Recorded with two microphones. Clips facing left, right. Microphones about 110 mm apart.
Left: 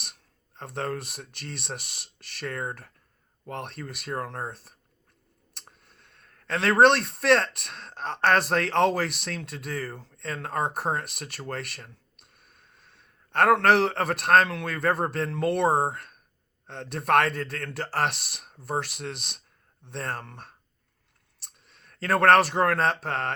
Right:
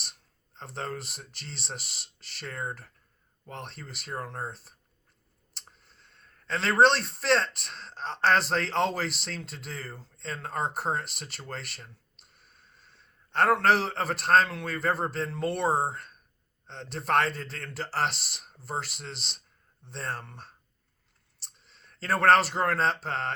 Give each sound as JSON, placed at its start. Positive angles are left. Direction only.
{"t": 0.5, "sound": "speech", "side_deg": 55}
{"t": 5.9, "sound": "a sound", "side_deg": 55}
{"t": 6.8, "sound": "speech", "side_deg": 55}
{"t": 10.6, "sound": "speech", "side_deg": 15}
{"t": 11.4, "sound": "a man's voice", "side_deg": 55}
{"t": 21.7, "sound": "a man's voice", "side_deg": 55}